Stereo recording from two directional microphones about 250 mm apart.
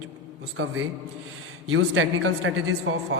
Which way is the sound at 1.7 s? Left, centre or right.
Right.